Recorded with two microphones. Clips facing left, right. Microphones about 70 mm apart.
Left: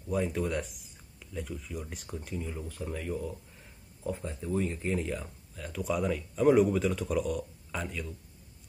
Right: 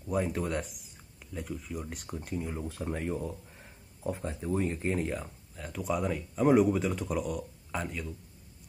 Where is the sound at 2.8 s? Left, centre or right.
Right.